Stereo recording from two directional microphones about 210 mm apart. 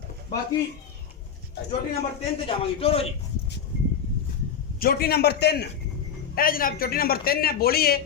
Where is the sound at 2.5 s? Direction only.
30° left (ahead or behind).